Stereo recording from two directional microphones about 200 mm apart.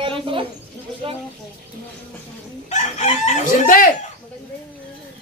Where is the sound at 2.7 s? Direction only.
35° left (ahead or behind).